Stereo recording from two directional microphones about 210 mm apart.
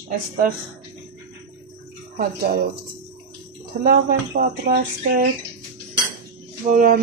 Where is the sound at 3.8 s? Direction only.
45° right (ahead or behind).